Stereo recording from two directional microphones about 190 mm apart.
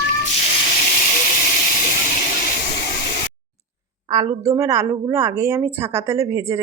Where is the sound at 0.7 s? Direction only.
40° left (ahead or behind).